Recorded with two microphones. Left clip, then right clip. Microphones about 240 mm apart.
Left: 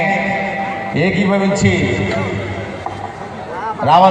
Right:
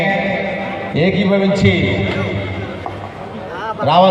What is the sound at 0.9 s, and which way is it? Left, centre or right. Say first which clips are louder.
Speech: right 1 dB; right.